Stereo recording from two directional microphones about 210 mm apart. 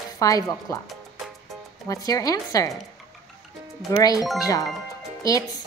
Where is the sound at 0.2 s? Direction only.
15° left (ahead or behind).